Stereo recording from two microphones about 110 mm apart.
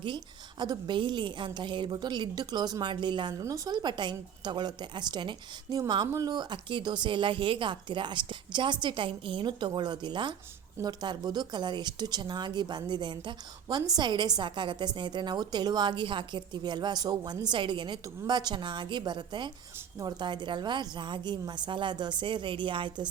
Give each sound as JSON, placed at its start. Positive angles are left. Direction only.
{"t": 0.6, "sound": "a woman's voice", "side_deg": -40}
{"t": 3.4, "sound": "a woman's voice", "side_deg": -30}